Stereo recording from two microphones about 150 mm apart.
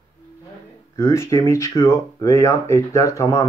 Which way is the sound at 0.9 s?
20° left (ahead or behind).